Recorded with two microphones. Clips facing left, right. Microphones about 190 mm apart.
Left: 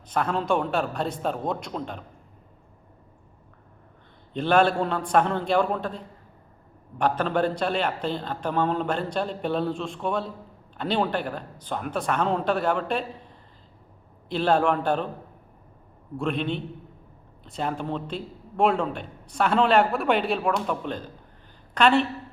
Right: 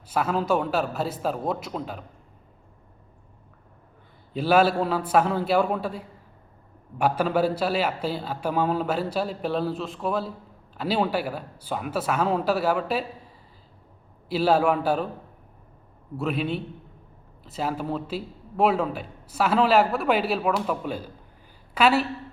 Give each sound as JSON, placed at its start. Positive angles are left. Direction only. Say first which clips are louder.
{"t": 0.1, "sound": "a man's voice", "louder": "right 1 dB", "side_deg": -5}
{"t": 4.4, "sound": "a man's voice", "louder": "right 1 dB", "side_deg": -5}
{"t": 14.3, "sound": "a man's voice", "louder": "right 1 dB", "side_deg": -5}
{"t": 16.1, "sound": "a man's voice", "louder": "even", "side_deg": -5}